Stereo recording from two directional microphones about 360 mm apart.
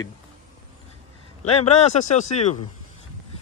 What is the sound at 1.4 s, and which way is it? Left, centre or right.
Speech, centre.